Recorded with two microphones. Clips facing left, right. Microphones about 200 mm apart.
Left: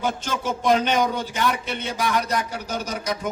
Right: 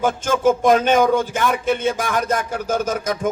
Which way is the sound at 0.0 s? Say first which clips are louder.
Right 9 dB; 50° right (ahead or behind).